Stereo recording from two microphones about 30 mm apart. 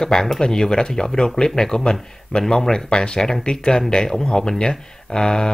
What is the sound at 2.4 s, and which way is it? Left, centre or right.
Speech, centre.